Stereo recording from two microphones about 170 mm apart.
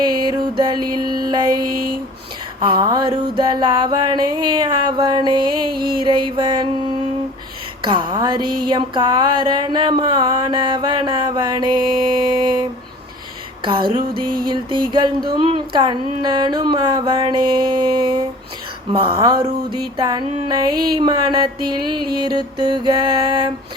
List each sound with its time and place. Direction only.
0.0 s music: 25° right (ahead or behind)
13.7 s music: 25° right (ahead or behind)